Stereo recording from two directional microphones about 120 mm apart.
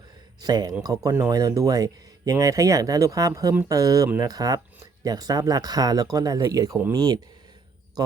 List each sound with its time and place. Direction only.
0.4 s speech: 35° right (ahead or behind)